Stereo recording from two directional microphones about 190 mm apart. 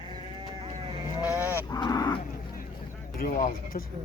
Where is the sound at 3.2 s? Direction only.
50° left (ahead or behind).